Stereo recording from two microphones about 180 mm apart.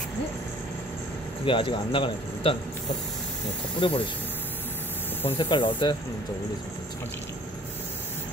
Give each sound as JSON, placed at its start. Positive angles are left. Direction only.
{"t": 1.4, "sound": "speech", "side_deg": 30}
{"t": 3.8, "sound": "speech", "side_deg": 25}
{"t": 5.4, "sound": "speech", "side_deg": 25}